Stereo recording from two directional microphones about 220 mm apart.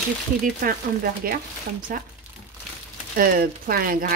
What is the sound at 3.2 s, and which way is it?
Speech, 40° right (ahead or behind).